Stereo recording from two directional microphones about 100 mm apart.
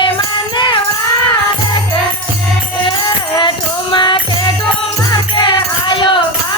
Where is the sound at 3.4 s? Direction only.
50° left (ahead or behind).